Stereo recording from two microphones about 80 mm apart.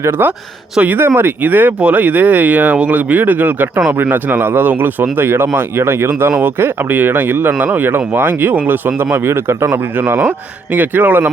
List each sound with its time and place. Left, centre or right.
0.0 s speech: right